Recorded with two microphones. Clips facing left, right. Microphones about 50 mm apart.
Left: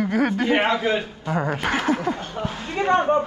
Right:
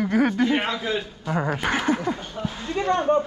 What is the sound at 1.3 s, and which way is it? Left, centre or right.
Speech, centre.